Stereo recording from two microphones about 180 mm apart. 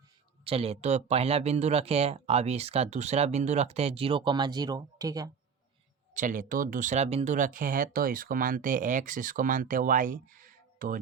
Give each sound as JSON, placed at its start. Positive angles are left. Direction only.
{"t": 0.4, "sound": "speech", "side_deg": -35}
{"t": 6.1, "sound": "speech", "side_deg": -45}